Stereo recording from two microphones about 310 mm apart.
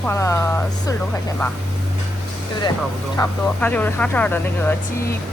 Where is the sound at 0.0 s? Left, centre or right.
Centre.